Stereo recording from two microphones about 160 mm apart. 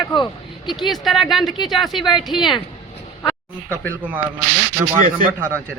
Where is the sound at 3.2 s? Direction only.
10° left (ahead or behind).